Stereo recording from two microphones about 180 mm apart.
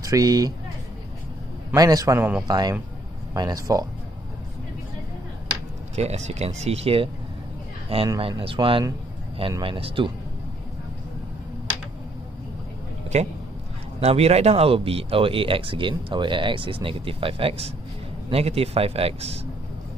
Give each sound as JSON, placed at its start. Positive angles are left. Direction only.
{"t": 0.0, "sound": "speech", "side_deg": -20}
{"t": 1.8, "sound": "speech", "side_deg": -20}
{"t": 2.4, "sound": "speech", "side_deg": -20}
{"t": 5.9, "sound": "speech", "side_deg": -35}
{"t": 8.2, "sound": "speech", "side_deg": -30}
{"t": 13.1, "sound": "speech", "side_deg": -35}